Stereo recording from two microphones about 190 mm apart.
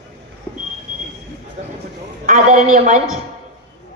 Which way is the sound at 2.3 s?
40° right (ahead or behind).